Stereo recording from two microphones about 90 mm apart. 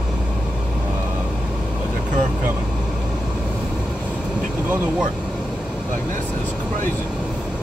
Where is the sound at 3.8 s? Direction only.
20° left (ahead or behind).